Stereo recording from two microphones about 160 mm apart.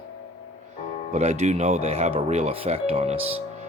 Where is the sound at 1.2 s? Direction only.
45° right (ahead or behind).